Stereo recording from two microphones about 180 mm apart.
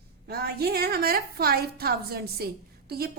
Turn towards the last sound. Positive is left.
turn(degrees=-60)  # may be behind; listen again after turning